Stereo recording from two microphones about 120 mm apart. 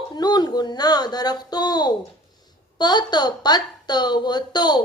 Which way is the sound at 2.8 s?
35° left (ahead or behind).